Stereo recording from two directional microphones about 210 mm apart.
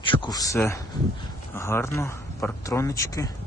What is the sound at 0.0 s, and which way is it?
Speech, 20° left (ahead or behind).